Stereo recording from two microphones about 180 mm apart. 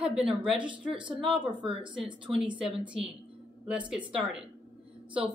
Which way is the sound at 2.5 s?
5° right (ahead or behind).